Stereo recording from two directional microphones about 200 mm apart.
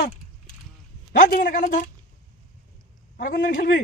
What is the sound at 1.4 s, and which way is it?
Speech, 40° left (ahead or behind).